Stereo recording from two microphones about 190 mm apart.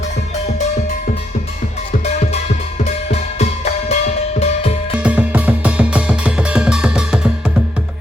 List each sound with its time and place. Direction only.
3.8 s music: 30° left (ahead or behind)
5.0 s music: 5° right (ahead or behind)